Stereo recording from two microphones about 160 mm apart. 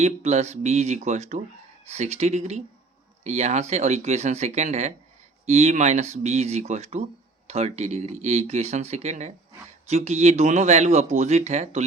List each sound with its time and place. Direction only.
0.0 s speech: 45° right (ahead or behind)